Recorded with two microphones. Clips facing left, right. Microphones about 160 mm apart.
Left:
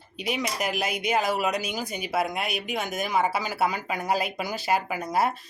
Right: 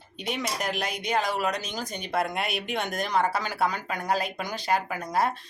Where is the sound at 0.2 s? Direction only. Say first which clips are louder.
Left 2 dB; 5° left (ahead or behind).